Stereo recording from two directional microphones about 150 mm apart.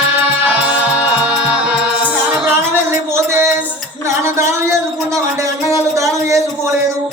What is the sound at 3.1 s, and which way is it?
Music, 15° right (ahead or behind).